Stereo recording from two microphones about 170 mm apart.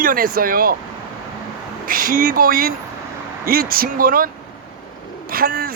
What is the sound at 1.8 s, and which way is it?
A man's voice, 55° right (ahead or behind).